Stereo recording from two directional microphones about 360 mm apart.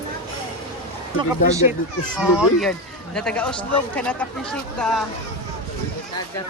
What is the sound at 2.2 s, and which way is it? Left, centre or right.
Speech, centre.